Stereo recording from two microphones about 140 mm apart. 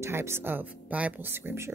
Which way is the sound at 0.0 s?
20° right (ahead or behind).